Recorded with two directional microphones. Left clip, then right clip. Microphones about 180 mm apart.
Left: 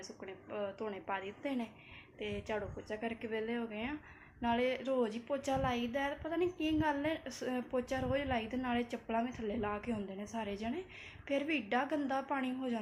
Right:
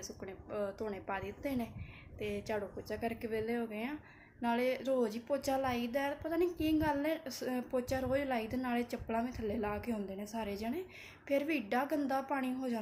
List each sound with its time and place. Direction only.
0.0 s a woman's voice: 10° right (ahead or behind)